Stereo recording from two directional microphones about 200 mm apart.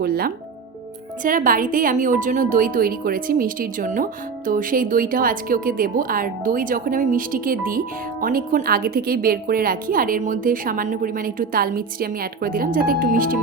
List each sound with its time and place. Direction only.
0.0 s a woman's voice: 50° right (ahead or behind)